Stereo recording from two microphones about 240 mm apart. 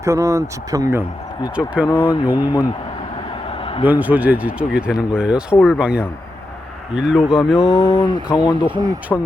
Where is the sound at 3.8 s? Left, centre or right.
Centre.